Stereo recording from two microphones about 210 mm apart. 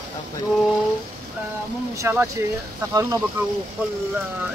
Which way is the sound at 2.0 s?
10° right (ahead or behind).